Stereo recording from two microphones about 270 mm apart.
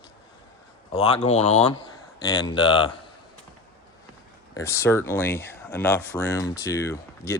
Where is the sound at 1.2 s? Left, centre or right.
Left.